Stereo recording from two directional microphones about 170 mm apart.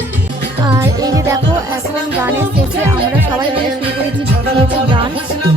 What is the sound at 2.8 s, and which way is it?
Speech, 10° right (ahead or behind).